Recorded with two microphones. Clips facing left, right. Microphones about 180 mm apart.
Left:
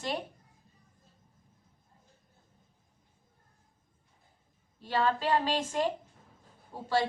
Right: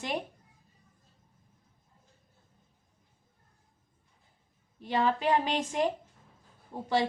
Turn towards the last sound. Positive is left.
turn(degrees=-20)  # may be behind; listen again after turning